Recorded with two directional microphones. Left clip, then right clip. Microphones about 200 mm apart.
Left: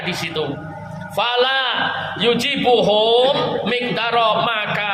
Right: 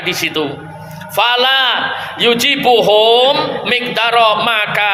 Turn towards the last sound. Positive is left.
turn(degrees=-35)  # may be behind; listen again after turning